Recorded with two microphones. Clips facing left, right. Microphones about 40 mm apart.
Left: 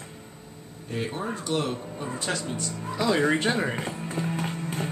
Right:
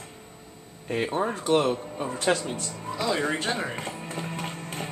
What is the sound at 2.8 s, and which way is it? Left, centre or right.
Speech, centre.